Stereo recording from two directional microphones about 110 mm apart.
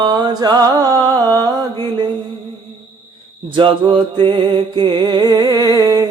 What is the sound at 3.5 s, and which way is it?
Music, 50° right (ahead or behind).